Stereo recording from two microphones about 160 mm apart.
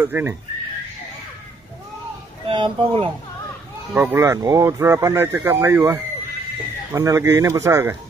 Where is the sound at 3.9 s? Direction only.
15° right (ahead or behind).